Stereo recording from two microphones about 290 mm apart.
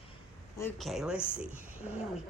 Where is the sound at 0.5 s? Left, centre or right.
Centre.